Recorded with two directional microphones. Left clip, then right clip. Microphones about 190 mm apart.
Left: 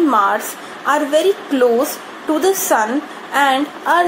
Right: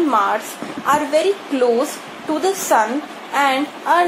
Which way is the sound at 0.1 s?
35° left (ahead or behind).